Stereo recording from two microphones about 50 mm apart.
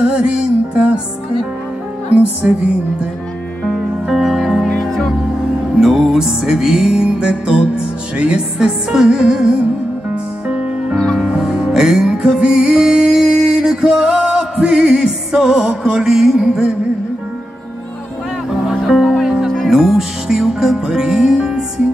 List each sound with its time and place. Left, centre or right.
0.0 s music: centre
4.1 s music: centre
5.8 s music: centre
11.1 s music: centre
18.7 s music: centre